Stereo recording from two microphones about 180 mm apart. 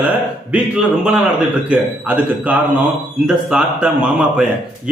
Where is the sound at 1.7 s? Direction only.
10° right (ahead or behind).